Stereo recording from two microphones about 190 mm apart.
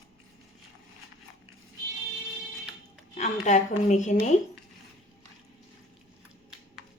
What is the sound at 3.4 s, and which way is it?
Speech, 40° left (ahead or behind).